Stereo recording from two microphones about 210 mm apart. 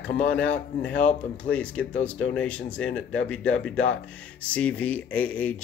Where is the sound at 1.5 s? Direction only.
5° left (ahead or behind).